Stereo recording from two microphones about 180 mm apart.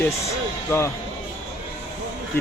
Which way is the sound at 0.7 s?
15° left (ahead or behind).